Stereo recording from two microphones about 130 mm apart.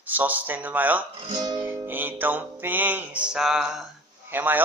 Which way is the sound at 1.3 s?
35° right (ahead or behind).